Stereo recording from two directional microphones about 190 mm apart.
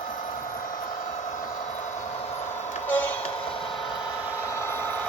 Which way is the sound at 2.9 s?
10° left (ahead or behind).